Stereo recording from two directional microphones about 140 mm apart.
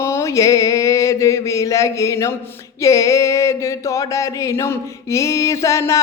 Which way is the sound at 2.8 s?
20° left (ahead or behind).